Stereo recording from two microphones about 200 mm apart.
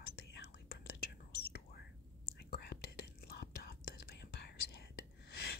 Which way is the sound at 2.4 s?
50° left (ahead or behind).